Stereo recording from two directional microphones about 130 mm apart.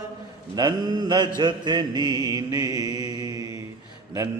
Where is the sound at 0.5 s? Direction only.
30° right (ahead or behind).